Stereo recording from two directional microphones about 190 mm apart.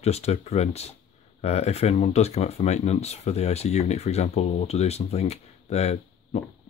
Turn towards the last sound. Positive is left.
turn(degrees=35)  # may be behind; listen again after turning